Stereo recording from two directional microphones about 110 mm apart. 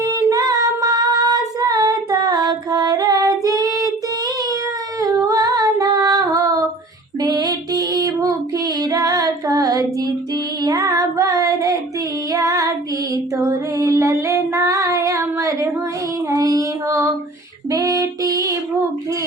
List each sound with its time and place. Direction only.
0.0 s female singing: 35° right (ahead or behind)
4.9 s female singing: 30° right (ahead or behind)
10.6 s child singing: 35° right (ahead or behind)
12.3 s female singing: 30° right (ahead or behind)
16.3 s child singing: 30° right (ahead or behind)
17.7 s female singing: 35° right (ahead or behind)